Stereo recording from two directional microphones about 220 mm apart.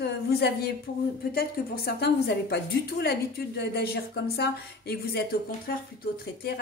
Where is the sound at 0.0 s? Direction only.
45° left (ahead or behind).